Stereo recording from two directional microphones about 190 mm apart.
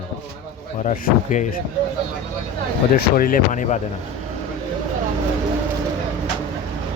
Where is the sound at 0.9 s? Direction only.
40° left (ahead or behind).